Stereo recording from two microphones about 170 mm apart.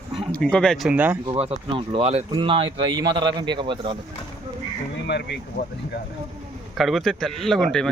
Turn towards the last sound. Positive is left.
turn(degrees=5)  # may be behind; listen again after turning